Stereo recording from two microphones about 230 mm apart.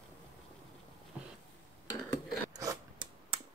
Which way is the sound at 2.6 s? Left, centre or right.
Centre.